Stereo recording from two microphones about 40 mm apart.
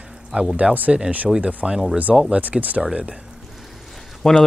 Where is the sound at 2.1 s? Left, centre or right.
Centre.